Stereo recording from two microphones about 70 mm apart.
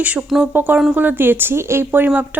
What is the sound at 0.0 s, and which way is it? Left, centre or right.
Speech, centre.